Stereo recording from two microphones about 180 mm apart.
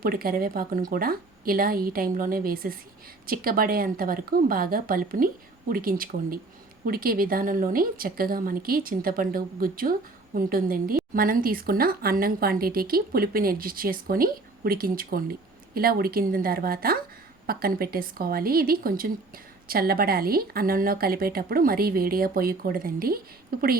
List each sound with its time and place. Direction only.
0.0 s speech: 55° right (ahead or behind)